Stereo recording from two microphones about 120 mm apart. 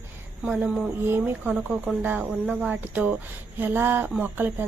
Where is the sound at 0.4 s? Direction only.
10° right (ahead or behind).